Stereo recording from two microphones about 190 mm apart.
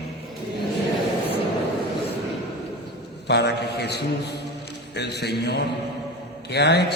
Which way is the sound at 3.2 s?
60° left (ahead or behind).